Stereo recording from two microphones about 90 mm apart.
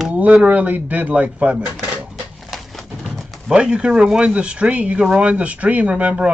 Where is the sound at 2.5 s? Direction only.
Centre (ahead or behind).